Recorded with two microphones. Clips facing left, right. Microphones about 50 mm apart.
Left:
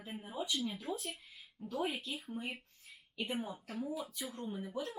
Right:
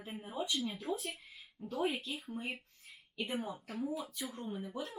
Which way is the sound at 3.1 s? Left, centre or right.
Centre.